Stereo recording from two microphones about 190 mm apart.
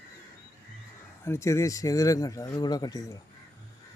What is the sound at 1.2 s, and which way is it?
Speech, 15° left (ahead or behind).